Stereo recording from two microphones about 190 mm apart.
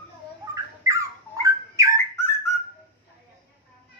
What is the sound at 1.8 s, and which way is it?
Bird, 15° right (ahead or behind).